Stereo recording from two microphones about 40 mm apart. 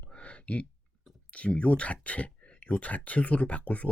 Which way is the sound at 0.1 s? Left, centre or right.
Left.